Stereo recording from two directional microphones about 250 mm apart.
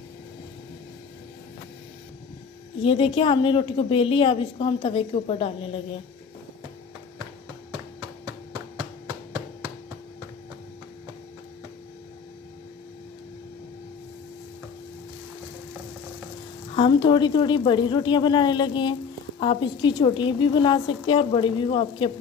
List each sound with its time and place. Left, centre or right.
2.8 s a woman's voice: left
16.7 s a woman's voice: centre